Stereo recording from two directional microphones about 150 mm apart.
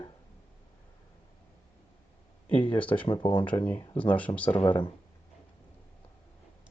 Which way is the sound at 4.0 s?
10° left (ahead or behind).